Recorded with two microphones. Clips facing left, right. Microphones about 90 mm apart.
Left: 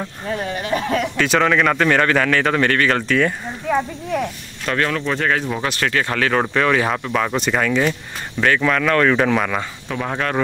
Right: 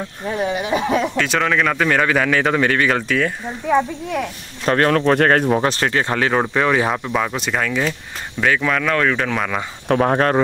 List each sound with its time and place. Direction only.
0.3 s speech: 15° right (ahead or behind)
1.1 s a man's voice: centre (ahead or behind)
3.0 s a man's voice: centre (ahead or behind)
4.6 s speech: 40° right (ahead or behind)
5.5 s a man's voice: 30° right (ahead or behind); by 9.6 s centre (ahead or behind)
9.8 s speech: 45° right (ahead or behind)